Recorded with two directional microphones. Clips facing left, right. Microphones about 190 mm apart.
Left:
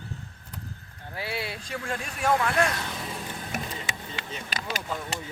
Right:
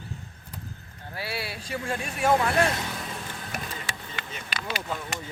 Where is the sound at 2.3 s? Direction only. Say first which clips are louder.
Right 1 dB; 20° right (ahead or behind).